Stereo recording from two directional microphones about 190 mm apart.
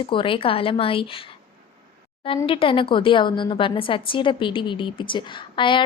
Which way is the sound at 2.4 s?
30° left (ahead or behind).